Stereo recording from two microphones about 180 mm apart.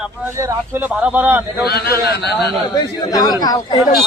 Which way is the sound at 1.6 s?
60° left (ahead or behind).